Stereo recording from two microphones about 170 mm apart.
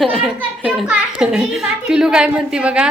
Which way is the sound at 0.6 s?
5° right (ahead or behind).